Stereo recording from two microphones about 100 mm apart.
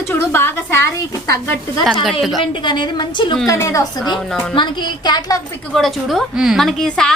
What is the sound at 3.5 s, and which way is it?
Speech, 30° left (ahead or behind).